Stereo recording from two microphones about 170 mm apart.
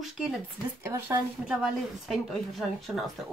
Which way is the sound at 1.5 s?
5° right (ahead or behind).